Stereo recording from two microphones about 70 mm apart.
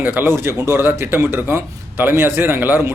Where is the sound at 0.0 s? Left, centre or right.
Right.